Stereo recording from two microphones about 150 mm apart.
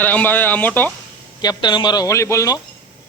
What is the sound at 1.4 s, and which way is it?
Speech, 30° left (ahead or behind).